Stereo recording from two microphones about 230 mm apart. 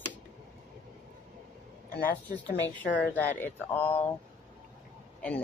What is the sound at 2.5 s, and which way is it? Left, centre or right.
Speech, left.